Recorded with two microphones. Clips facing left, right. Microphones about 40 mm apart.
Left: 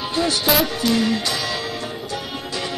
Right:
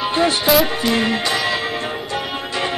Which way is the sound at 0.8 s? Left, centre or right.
Right.